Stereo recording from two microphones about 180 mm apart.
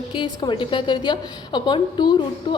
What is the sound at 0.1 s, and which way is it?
A woman's voice, 25° left (ahead or behind).